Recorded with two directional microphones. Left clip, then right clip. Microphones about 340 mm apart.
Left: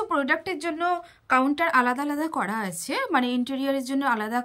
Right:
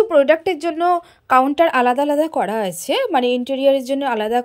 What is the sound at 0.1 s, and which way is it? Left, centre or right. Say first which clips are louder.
A woman's voice: right 11 dB; centre.